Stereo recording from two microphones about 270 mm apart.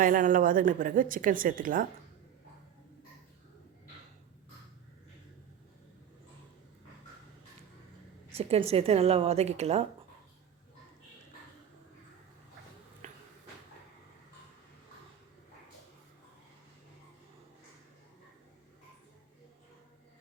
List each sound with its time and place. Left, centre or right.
0.0 s a woman's voice: right
8.3 s a woman's voice: right
13.0 s a sound: right